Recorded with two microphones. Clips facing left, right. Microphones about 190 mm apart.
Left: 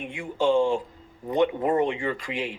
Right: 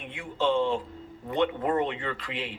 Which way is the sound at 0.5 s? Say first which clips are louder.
Left 5 dB; 30° left (ahead or behind).